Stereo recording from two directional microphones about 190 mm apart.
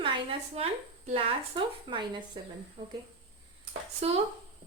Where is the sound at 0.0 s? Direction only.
30° right (ahead or behind).